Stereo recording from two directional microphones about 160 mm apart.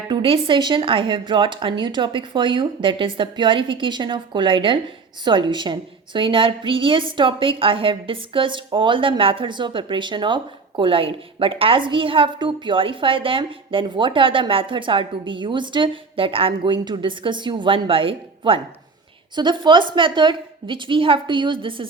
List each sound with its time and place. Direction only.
0.1 s a woman's voice: 30° right (ahead or behind)